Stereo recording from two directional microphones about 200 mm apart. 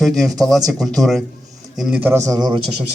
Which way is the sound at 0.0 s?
Centre (ahead or behind).